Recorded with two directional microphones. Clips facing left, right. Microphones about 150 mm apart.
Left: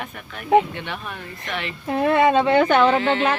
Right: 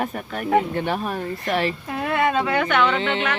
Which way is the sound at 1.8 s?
30° left (ahead or behind).